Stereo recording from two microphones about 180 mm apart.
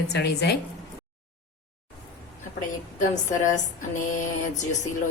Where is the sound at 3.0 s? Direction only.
45° left (ahead or behind).